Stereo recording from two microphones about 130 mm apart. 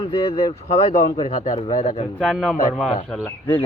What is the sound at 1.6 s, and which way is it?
Speech, 60° left (ahead or behind).